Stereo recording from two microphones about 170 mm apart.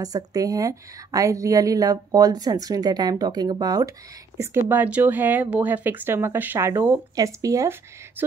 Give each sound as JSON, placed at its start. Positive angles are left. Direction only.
{"t": 0.0, "sound": "a woman's voice", "side_deg": -20}
{"t": 4.6, "sound": "speech", "side_deg": -10}